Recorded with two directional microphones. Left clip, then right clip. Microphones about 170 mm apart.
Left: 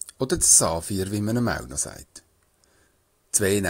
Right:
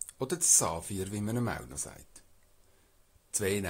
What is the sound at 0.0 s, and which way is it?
Speech, 25° left (ahead or behind).